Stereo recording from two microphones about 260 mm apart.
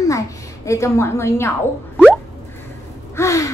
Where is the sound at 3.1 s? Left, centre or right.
Centre.